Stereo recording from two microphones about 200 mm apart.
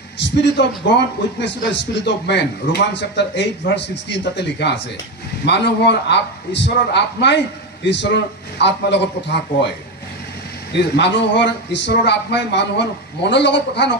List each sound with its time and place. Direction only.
0.2 s a man's voice: 60° left (ahead or behind)
11.0 s a man's voice: 60° left (ahead or behind)